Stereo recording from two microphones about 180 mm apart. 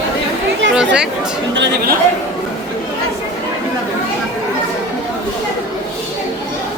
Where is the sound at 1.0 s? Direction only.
5° right (ahead or behind).